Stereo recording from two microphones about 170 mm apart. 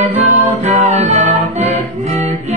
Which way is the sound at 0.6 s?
40° right (ahead or behind).